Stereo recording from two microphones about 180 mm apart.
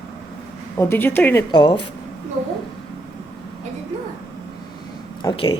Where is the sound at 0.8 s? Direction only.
10° left (ahead or behind).